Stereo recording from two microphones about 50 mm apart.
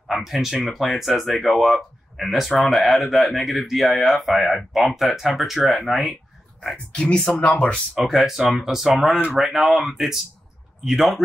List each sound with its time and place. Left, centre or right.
0.0 s speech: centre
6.9 s speech: left
7.9 s speech: centre